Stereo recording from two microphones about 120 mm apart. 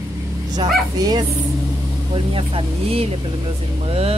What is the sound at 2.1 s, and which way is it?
Speech, 50° right (ahead or behind).